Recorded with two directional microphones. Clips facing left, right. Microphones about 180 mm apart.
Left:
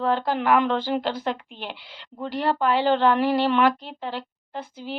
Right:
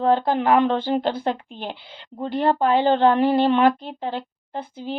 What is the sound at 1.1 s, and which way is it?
Speech, 35° right (ahead or behind).